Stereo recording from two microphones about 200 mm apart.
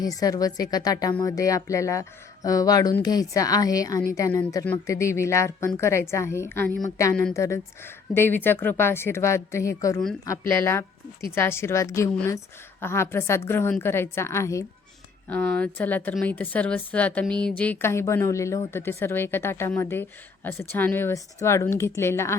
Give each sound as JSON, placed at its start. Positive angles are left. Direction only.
{"t": 0.0, "sound": "speech", "side_deg": 20}